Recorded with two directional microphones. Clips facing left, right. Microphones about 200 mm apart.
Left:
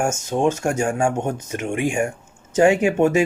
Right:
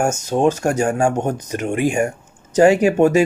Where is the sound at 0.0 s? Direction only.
40° right (ahead or behind).